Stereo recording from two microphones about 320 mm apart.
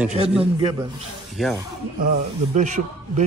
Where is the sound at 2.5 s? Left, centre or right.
Right.